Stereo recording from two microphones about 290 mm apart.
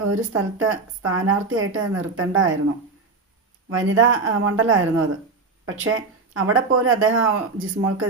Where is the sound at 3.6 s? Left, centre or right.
Right.